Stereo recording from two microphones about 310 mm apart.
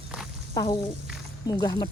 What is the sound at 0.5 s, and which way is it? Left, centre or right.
Speech, centre.